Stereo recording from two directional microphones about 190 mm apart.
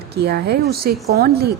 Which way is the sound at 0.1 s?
60° right (ahead or behind).